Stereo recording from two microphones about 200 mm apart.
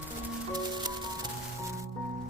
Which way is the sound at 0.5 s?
20° right (ahead or behind).